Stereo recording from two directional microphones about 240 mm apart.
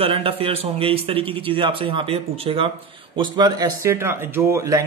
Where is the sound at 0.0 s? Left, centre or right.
Right.